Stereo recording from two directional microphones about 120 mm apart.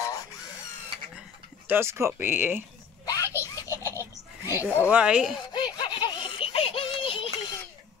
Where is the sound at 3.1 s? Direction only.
30° left (ahead or behind).